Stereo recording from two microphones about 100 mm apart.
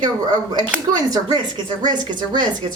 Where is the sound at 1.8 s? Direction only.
45° right (ahead or behind).